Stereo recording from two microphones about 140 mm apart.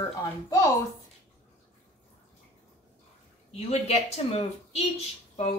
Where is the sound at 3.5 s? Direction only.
50° left (ahead or behind).